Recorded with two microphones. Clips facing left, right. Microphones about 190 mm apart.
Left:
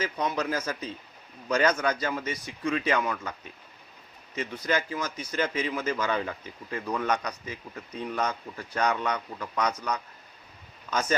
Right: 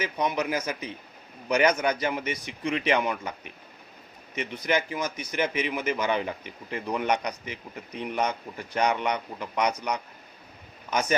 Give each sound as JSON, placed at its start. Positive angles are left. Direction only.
{"t": 0.0, "sound": "a man's voice", "side_deg": -15}